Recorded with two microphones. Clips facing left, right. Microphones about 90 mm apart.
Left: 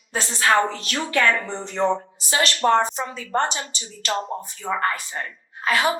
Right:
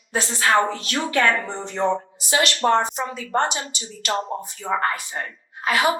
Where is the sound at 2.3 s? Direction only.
35° left (ahead or behind).